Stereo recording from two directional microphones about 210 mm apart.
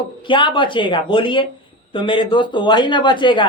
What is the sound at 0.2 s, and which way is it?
Speech, 25° left (ahead or behind).